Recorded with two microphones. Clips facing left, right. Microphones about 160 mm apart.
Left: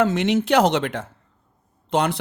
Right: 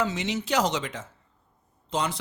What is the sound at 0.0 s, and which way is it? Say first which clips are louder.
Speech: left 9 dB; 55° left (ahead or behind).